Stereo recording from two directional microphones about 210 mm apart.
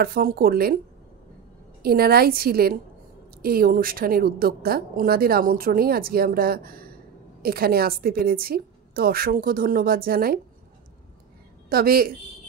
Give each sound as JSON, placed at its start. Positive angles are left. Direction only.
{"t": 0.0, "sound": "a woman's voice", "side_deg": -45}
{"t": 1.8, "sound": "a woman's voice", "side_deg": -45}
{"t": 11.7, "sound": "a woman's voice", "side_deg": -45}